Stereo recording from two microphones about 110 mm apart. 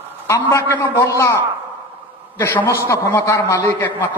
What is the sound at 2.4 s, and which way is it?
A man's voice, 20° left (ahead or behind).